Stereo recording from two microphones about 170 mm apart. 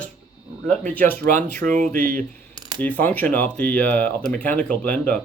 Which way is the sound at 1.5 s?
50° right (ahead or behind).